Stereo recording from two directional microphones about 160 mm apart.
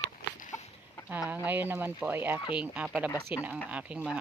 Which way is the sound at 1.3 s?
10° right (ahead or behind).